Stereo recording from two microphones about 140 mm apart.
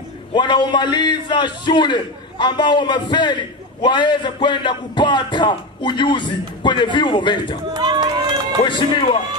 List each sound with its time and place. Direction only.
0.3 s speech: 35° left (ahead or behind)
7.7 s run: 30° right (ahead or behind)
8.6 s speech: 35° left (ahead or behind)